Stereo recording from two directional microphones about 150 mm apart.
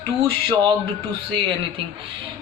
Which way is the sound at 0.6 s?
30° right (ahead or behind).